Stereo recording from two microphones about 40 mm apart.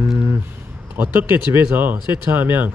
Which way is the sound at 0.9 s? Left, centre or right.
Right.